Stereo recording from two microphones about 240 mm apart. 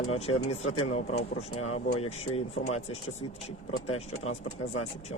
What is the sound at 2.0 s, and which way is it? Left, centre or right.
Speech, left.